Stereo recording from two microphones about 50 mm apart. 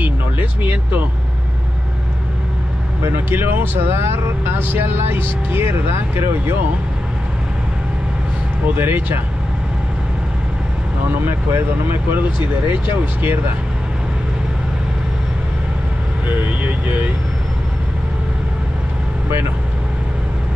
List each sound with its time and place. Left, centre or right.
0.0 s speech: right
3.3 s speech: right
8.6 s speech: right
11.2 s speech: right
16.3 s speech: right